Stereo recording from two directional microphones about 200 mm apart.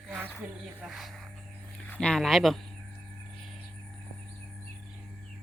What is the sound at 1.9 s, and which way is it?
Speech, 5° left (ahead or behind).